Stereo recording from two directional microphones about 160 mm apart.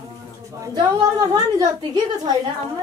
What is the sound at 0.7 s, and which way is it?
A woman's voice, 25° right (ahead or behind).